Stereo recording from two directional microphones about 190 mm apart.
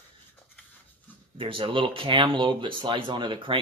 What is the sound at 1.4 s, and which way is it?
Speech, 30° right (ahead or behind).